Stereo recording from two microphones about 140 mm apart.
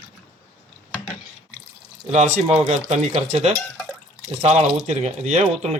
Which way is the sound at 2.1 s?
55° right (ahead or behind).